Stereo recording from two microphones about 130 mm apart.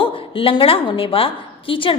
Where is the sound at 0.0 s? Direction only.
45° left (ahead or behind).